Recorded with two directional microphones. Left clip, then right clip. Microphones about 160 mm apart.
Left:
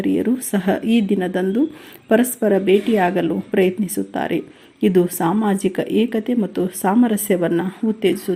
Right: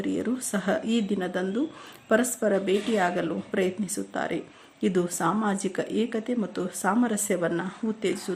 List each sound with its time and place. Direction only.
0.0 s speech: 20° left (ahead or behind)